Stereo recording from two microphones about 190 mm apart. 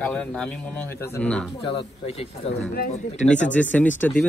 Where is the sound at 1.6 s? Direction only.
30° left (ahead or behind).